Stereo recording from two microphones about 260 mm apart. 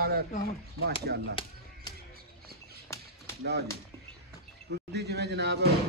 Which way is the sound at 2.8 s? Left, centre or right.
Centre.